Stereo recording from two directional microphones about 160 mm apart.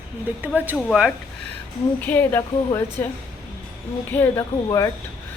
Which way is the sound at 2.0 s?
10° left (ahead or behind).